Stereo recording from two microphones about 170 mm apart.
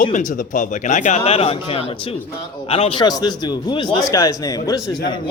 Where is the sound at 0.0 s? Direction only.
50° left (ahead or behind).